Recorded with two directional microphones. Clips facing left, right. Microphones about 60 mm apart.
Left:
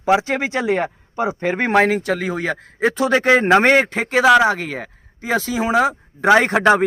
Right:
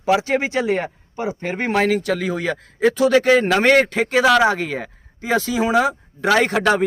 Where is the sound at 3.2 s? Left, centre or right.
Left.